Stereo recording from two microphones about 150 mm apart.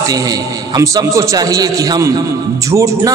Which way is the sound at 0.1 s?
25° right (ahead or behind).